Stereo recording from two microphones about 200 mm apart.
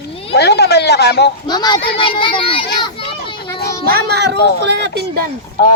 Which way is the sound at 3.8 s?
50° right (ahead or behind).